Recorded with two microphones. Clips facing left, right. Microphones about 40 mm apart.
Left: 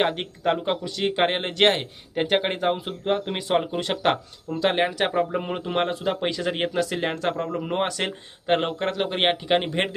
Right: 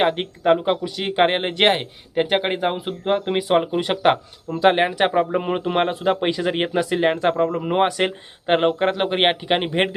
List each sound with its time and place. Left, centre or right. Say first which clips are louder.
0.0 s speech: right 4 dB; centre